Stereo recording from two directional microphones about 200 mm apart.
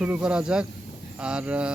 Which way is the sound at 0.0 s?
5° right (ahead or behind).